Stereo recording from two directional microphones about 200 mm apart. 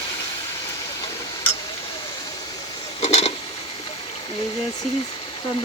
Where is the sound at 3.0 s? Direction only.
30° left (ahead or behind).